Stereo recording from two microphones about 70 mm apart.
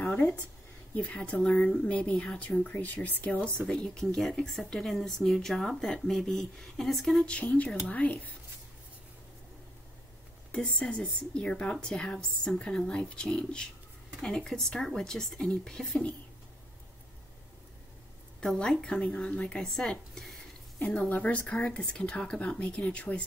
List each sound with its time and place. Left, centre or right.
0.0 s a sound: left
0.9 s a woman's voice: centre
3.4 s a woman's voice: centre
7.2 s a woman's voice: centre
10.5 s a woman's voice: centre
18.4 s a woman's voice: centre
19.6 s speech: centre
20.8 s a woman's voice: centre